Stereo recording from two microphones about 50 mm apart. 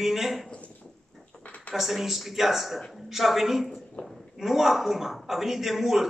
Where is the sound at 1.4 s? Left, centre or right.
Left.